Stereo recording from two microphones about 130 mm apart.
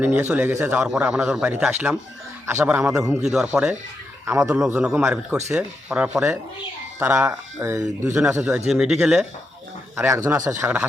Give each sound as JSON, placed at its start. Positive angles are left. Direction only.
{"t": 0.0, "sound": "a man's voice", "side_deg": -15}
{"t": 3.2, "sound": "a man's voice", "side_deg": -5}
{"t": 6.1, "sound": "a man's voice", "side_deg": -20}
{"t": 9.9, "sound": "speech", "side_deg": -20}